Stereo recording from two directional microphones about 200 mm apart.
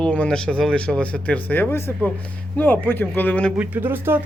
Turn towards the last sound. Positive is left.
turn(degrees=-10)  # may be behind; listen again after turning